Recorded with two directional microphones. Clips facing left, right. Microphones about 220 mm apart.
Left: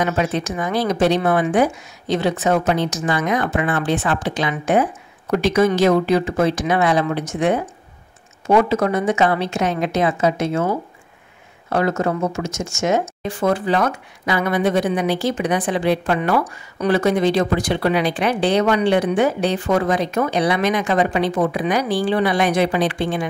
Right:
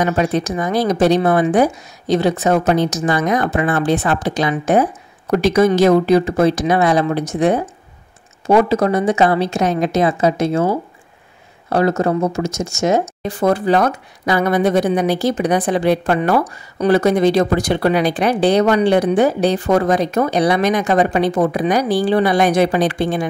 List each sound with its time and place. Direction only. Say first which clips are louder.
0.0 s speech: right 3 dB; 40° right (ahead or behind)